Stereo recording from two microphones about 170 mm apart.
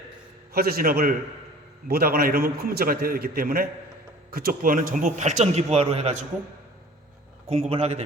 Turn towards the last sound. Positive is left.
turn(degrees=-35)  # may be behind; listen again after turning